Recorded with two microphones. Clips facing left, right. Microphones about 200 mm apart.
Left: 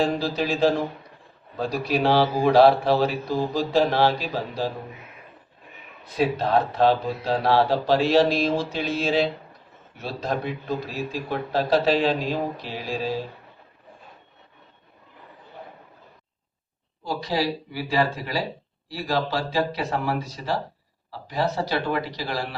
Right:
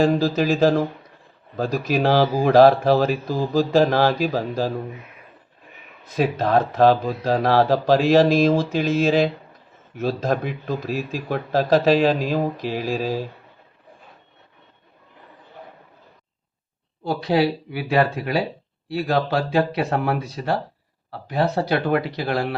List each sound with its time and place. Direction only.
0.0 s speech: 45° right (ahead or behind)
6.7 s speech: 45° right (ahead or behind)
17.0 s speech: 60° right (ahead or behind)